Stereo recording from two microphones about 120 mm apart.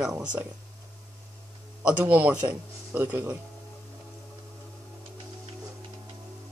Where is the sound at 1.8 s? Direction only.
10° right (ahead or behind).